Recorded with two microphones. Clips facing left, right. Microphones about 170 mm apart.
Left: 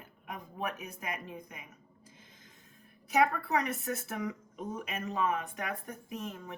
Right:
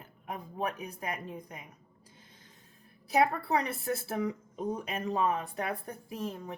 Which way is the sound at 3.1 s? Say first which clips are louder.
Right 1 dB; 35° right (ahead or behind).